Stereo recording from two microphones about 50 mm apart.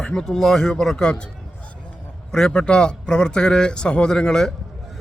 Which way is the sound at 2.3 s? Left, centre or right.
Centre.